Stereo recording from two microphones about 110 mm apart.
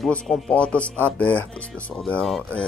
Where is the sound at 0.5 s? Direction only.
10° left (ahead or behind).